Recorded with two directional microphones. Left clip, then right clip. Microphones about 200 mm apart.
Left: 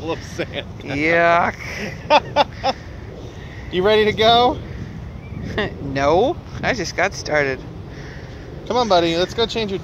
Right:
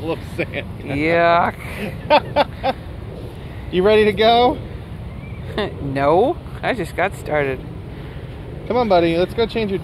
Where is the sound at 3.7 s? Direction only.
35° right (ahead or behind).